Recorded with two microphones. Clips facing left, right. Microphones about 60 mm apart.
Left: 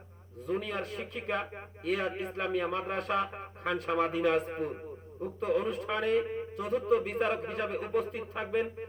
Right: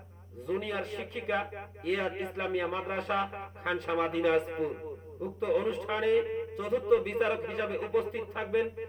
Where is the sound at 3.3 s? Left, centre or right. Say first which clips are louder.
Even; centre.